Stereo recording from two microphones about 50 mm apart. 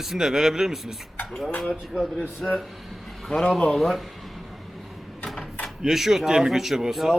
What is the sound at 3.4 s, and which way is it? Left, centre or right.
Speech, left.